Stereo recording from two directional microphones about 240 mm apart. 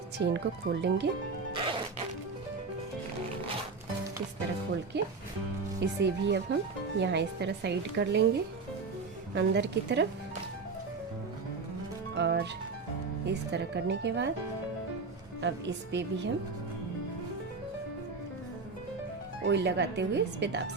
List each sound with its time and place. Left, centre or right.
0.2 s a woman's voice: right
4.9 s a woman's voice: right
12.1 s a woman's voice: right
15.4 s a woman's voice: right
19.5 s a woman's voice: right